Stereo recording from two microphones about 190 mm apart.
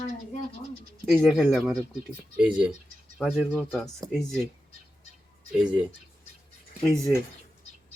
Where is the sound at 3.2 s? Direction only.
Centre (ahead or behind).